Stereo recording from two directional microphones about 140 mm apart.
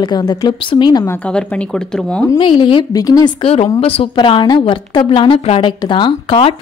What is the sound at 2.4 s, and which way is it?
Speech, 35° left (ahead or behind).